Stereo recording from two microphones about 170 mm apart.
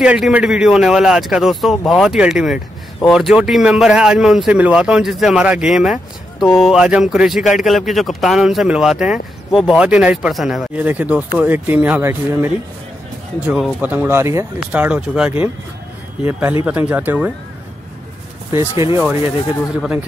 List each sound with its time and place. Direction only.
0.0 s speech: 5° right (ahead or behind)
18.5 s speech: 15° right (ahead or behind)